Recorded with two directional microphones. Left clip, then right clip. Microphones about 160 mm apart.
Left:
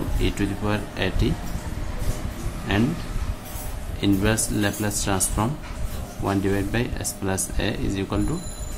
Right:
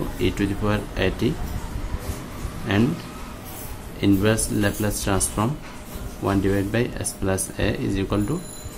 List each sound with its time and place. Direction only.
0.2 s speech: 20° right (ahead or behind)
2.7 s speech: 20° right (ahead or behind)
4.0 s speech: 20° right (ahead or behind)